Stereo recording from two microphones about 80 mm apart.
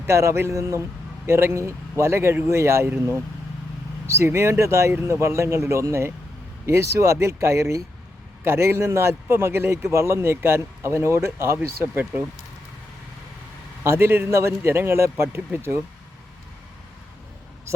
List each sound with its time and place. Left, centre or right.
0.0 s a man's voice: right
13.8 s a man's voice: right